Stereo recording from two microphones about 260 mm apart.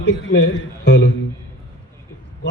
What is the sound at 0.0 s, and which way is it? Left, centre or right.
A man's voice, left.